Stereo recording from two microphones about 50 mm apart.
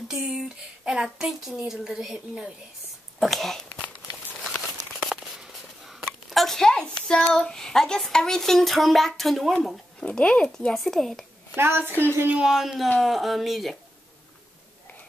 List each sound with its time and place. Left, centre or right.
0.1 s speech: centre
4.6 s a sound: centre
6.8 s a child's voice: centre
9.9 s a child's voice: left
10.7 s speech: centre
11.5 s a woman's voice: right
12.4 s speech: centre